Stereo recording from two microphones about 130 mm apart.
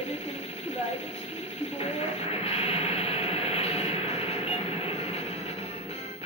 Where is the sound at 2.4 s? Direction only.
50° left (ahead or behind).